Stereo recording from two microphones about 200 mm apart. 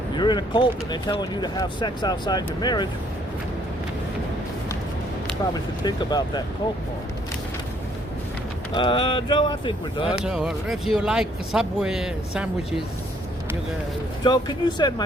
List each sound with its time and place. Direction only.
0.2 s speech: 20° left (ahead or behind)
5.8 s speech: 20° left (ahead or behind)
8.7 s speech: 25° left (ahead or behind)
10.2 s speech: 5° right (ahead or behind)
14.3 s speech: 20° left (ahead or behind)